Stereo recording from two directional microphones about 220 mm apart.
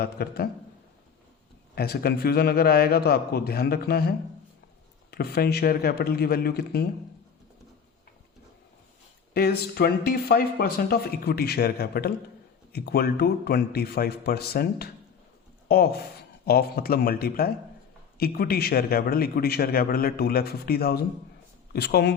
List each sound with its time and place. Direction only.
0.0 s a man's voice: 45° left (ahead or behind)
1.7 s a man's voice: 45° left (ahead or behind)
5.1 s a man's voice: 45° left (ahead or behind)
9.3 s a man's voice: 45° left (ahead or behind)